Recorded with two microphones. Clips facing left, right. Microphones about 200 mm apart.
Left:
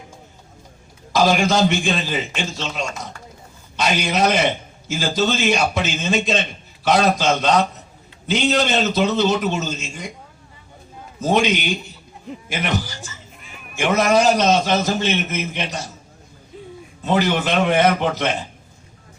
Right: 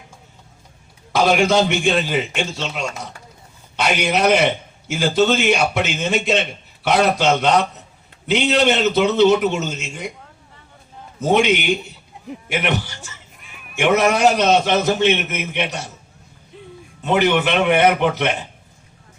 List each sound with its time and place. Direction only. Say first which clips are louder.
1.1 s a man's voice: right 1 dB; 65° right (ahead or behind)
3.8 s a man's voice: right 1 dB; 60° right (ahead or behind)
11.2 s a man's voice: right 2 dB; 65° right (ahead or behind)
13.4 s a sound: left 3 dB; centre (ahead or behind)
13.7 s a man's voice: even; 65° right (ahead or behind)
17.0 s a man's voice: right 2 dB; 65° right (ahead or behind)